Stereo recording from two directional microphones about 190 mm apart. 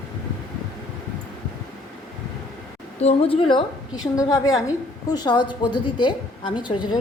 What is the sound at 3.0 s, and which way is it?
A woman's voice, 30° left (ahead or behind).